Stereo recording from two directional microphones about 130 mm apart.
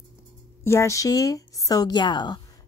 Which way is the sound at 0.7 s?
20° left (ahead or behind).